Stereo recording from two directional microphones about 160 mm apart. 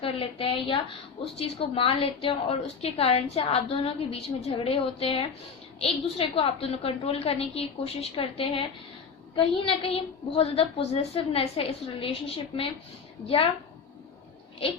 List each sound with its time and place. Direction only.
0.0 s a woman's voice: 35° left (ahead or behind)